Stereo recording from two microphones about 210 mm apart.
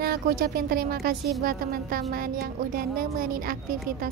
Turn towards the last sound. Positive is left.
turn(degrees=-45)  # may be behind; listen again after turning